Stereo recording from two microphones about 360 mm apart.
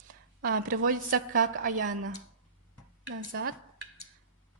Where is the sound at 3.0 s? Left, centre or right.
Right.